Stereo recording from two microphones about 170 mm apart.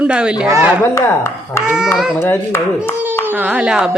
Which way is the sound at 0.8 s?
15° left (ahead or behind).